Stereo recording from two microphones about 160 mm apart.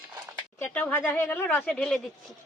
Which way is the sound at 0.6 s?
10° left (ahead or behind).